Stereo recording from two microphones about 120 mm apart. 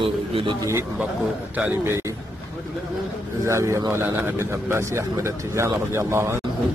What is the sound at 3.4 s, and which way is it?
A man's voice, 25° right (ahead or behind).